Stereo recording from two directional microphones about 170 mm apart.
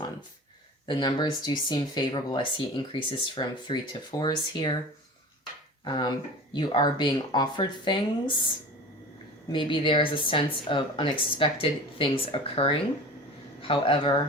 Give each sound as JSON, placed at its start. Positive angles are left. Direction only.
{"t": 0.9, "sound": "speech", "side_deg": 25}
{"t": 5.8, "sound": "speech", "side_deg": 25}
{"t": 9.5, "sound": "speech", "side_deg": 30}